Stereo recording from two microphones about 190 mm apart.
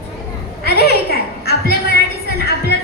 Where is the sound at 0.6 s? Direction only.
60° left (ahead or behind).